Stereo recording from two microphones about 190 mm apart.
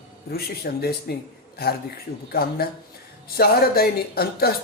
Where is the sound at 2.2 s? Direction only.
55° left (ahead or behind).